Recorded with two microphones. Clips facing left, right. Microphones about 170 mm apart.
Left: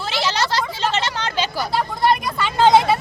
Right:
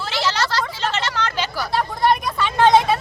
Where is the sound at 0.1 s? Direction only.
15° left (ahead or behind).